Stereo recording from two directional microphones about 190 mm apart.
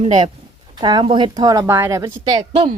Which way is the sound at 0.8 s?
25° right (ahead or behind).